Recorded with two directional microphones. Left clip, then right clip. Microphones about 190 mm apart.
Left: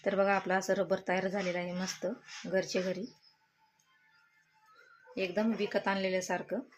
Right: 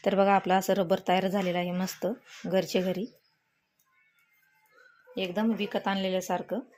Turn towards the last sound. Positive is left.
turn(degrees=-25)  # may be behind; listen again after turning